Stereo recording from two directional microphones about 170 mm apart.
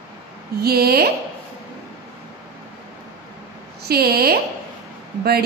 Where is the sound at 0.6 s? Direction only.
65° right (ahead or behind).